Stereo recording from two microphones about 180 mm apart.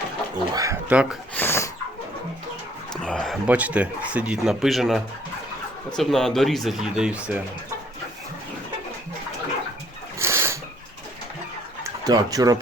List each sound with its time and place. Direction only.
0.5 s speech: 15° right (ahead or behind)
1.4 s dog: 15° left (ahead or behind)
2.9 s speech: 5° left (ahead or behind)
6.0 s speech: centre (ahead or behind)
10.2 s a sound: 15° right (ahead or behind)
12.0 s speech: 20° right (ahead or behind)